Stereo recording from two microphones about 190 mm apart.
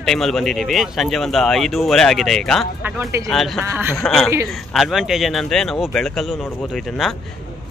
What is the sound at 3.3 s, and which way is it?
Speech, centre (ahead or behind).